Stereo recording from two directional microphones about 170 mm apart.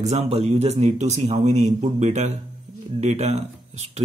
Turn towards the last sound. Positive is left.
turn(degrees=-40)  # may be behind; listen again after turning